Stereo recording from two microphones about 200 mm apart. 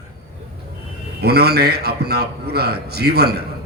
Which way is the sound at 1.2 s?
55° right (ahead or behind).